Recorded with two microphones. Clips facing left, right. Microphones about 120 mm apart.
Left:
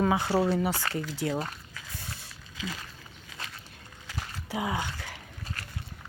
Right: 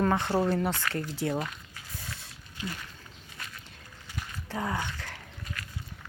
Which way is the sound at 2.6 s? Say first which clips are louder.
Even; 90° left.